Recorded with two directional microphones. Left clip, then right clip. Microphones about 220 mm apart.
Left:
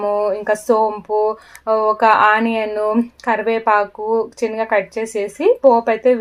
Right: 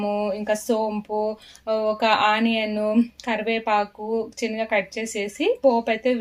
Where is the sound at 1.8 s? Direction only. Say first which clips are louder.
Left 7 dB; 50° left (ahead or behind).